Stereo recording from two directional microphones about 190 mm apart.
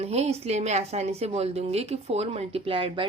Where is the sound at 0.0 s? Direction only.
35° right (ahead or behind).